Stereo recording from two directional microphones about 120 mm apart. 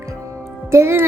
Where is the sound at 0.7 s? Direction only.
20° right (ahead or behind).